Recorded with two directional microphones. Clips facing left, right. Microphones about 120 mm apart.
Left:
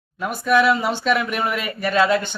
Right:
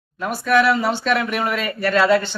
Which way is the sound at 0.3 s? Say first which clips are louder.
Even; 15° left (ahead or behind).